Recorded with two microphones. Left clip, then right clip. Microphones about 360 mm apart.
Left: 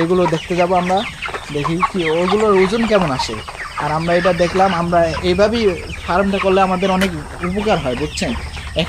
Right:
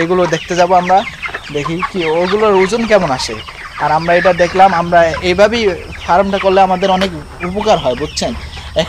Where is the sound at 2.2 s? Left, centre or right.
Right.